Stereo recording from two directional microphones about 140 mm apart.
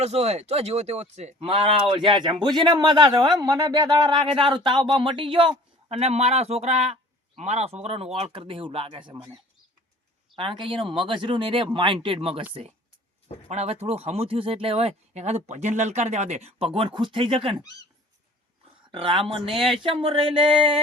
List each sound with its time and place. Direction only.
0.0 s speech: 50° right (ahead or behind)
10.3 s speech: 35° right (ahead or behind)
13.5 s speech: 50° right (ahead or behind)
18.9 s speech: 40° right (ahead or behind)